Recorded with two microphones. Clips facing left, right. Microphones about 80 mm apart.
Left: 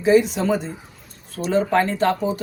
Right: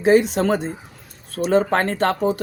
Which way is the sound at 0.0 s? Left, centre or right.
Right.